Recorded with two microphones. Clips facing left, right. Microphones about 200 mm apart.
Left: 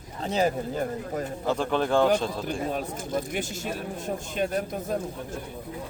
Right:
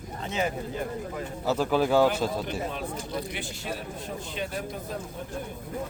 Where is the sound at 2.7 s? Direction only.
45° left (ahead or behind).